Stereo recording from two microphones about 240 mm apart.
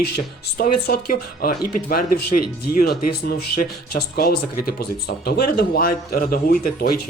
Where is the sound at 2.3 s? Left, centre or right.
Left.